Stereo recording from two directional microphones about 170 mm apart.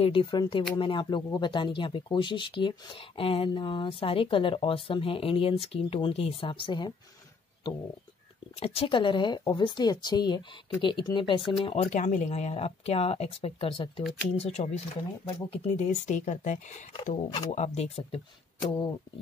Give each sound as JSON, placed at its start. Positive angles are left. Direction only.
{"t": 0.0, "sound": "speech", "side_deg": 30}
{"t": 8.5, "sound": "speech", "side_deg": 35}
{"t": 15.9, "sound": "speech", "side_deg": 45}